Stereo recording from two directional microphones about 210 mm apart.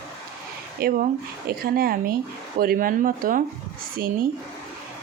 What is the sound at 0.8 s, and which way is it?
Speech, 45° right (ahead or behind).